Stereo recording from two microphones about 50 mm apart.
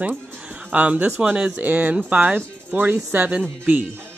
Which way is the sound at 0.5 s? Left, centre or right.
Right.